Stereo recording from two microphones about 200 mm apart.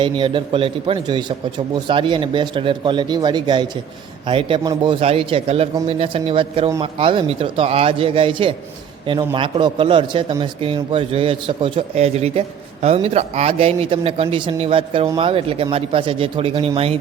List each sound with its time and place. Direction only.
0.0 s a man's voice: 25° right (ahead or behind)
15.0 s speech: 15° right (ahead or behind)
15.3 s a man's voice: 30° right (ahead or behind)